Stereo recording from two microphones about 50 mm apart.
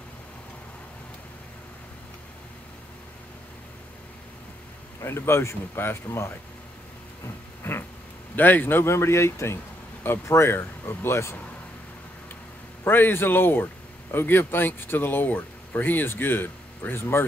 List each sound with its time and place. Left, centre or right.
5.0 s speech: left
7.7 s a sound: left
8.4 s speech: left
8.8 s speech: left
10.5 s speech: left
12.8 s speech: left